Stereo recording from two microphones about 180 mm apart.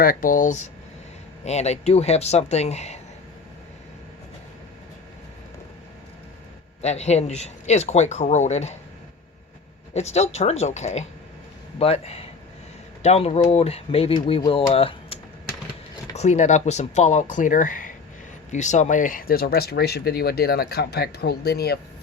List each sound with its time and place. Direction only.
0.0 s a man's voice: 50° left (ahead or behind)
6.8 s a man's voice: 35° left (ahead or behind)
9.9 s a man's voice: 35° left (ahead or behind)
14.7 s typing: 30° left (ahead or behind)
16.1 s a man's voice: 40° left (ahead or behind); by 21.8 s 60° left (ahead or behind)